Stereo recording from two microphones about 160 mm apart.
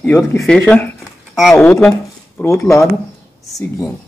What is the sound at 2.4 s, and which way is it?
Speech, 15° left (ahead or behind).